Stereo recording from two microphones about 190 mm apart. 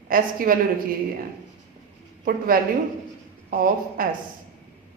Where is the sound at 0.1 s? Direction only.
50° right (ahead or behind).